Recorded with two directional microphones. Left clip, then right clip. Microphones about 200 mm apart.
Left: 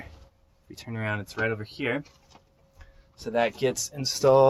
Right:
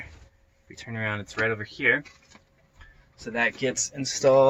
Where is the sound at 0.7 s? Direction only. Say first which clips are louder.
Right 1 dB; 40° left (ahead or behind).